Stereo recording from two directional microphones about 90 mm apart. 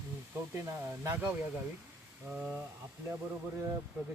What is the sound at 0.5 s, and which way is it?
Speech, 35° right (ahead or behind).